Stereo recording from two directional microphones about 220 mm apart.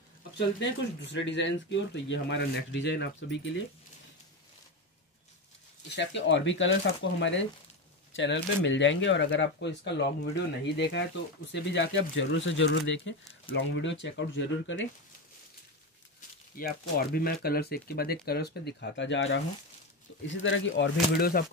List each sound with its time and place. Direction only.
0.6 s speech: 55° left (ahead or behind)
5.9 s speech: 55° left (ahead or behind)
16.5 s speech: 40° left (ahead or behind)